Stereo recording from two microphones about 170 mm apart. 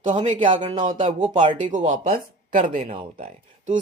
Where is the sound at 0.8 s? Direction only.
45° right (ahead or behind).